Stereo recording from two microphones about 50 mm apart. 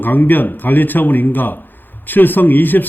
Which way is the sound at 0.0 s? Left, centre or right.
Left.